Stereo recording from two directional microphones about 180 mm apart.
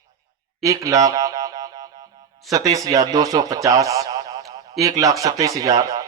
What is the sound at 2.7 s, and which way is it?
A man's voice, 20° right (ahead or behind).